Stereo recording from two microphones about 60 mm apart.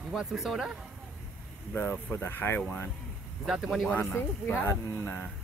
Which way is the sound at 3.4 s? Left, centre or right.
Centre.